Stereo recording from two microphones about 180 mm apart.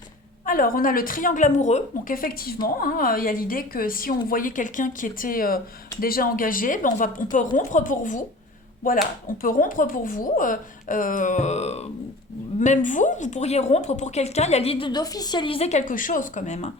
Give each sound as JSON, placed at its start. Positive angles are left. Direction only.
{"t": 0.4, "sound": "a woman's voice", "side_deg": 50}
{"t": 9.4, "sound": "a woman's voice", "side_deg": 50}